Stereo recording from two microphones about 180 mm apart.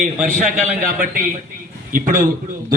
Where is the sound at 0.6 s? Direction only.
45° right (ahead or behind).